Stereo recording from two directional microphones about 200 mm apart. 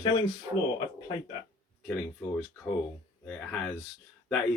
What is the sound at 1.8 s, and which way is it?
Speech, 5° left (ahead or behind).